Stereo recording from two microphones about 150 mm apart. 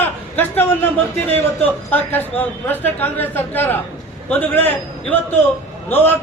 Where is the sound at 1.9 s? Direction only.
10° left (ahead or behind).